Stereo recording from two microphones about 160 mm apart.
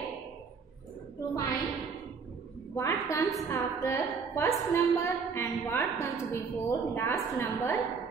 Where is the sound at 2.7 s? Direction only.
20° left (ahead or behind).